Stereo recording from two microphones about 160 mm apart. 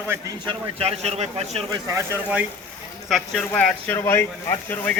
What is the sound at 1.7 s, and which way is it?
Speech, 20° right (ahead or behind).